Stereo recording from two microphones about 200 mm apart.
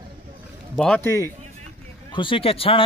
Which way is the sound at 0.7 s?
5° left (ahead or behind).